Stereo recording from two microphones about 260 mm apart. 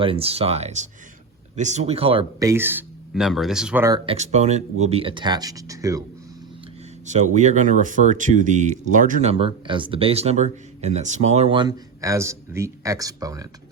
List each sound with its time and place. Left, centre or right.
0.0 s speech: right
7.1 s speech: right